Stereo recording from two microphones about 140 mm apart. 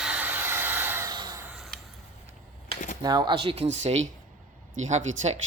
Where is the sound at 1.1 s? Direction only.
25° right (ahead or behind).